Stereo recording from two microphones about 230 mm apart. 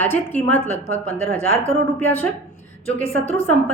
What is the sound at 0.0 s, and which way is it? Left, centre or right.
A woman's voice, centre.